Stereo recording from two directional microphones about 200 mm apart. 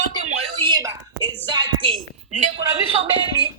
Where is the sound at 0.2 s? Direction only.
90° right.